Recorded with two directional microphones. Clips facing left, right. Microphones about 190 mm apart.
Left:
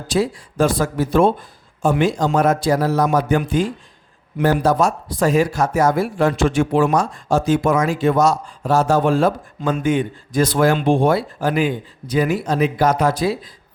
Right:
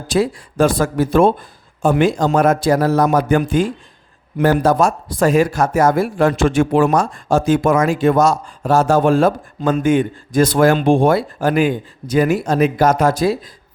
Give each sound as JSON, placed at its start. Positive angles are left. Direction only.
{"t": 0.1, "sound": "speech", "side_deg": -55}